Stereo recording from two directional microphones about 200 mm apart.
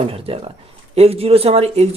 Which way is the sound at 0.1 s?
30° right (ahead or behind).